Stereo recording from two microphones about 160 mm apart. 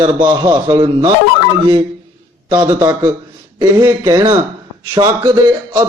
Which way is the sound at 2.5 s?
25° right (ahead or behind).